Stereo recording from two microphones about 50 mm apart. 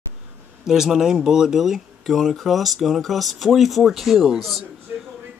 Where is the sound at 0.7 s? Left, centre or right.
Centre.